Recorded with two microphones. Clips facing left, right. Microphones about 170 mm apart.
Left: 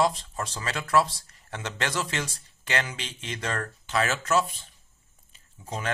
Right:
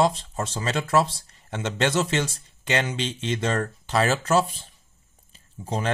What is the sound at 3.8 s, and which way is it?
Speech, 35° right (ahead or behind).